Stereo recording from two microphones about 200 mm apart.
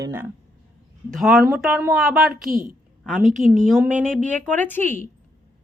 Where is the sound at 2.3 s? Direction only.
45° right (ahead or behind).